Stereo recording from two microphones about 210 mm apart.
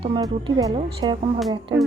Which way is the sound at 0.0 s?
20° right (ahead or behind).